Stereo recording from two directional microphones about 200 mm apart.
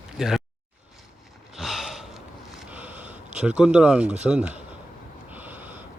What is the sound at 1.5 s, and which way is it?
Gasp, centre (ahead or behind).